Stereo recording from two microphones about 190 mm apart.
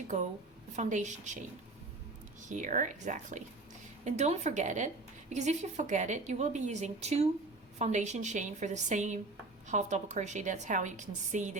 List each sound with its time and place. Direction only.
0.8 s a woman's voice: 40° right (ahead or behind)
2.5 s a woman's voice: 40° right (ahead or behind)